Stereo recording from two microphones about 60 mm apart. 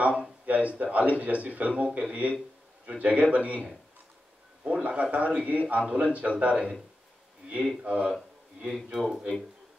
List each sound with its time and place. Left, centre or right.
0.0 s speech: right
4.6 s speech: right
7.8 s speech: right
8.9 s speech: centre